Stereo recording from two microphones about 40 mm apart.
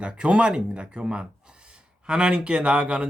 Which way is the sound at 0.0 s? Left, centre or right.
Right.